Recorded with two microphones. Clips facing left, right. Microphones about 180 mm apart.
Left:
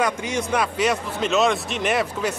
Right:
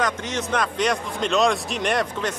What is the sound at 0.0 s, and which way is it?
Speech, 10° left (ahead or behind).